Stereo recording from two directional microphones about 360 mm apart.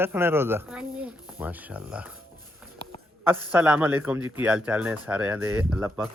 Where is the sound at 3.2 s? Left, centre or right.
Centre.